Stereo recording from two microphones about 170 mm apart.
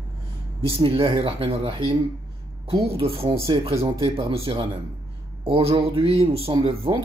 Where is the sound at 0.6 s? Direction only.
35° right (ahead or behind).